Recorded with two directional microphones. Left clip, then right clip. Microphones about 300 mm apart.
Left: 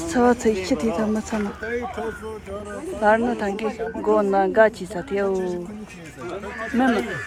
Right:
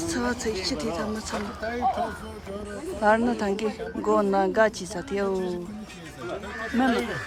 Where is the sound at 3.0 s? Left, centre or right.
Centre.